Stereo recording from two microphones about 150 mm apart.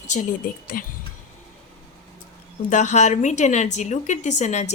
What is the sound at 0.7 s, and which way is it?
Speech, 80° left.